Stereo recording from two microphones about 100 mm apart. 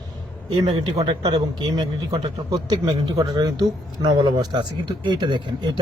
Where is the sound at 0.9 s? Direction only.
45° right (ahead or behind).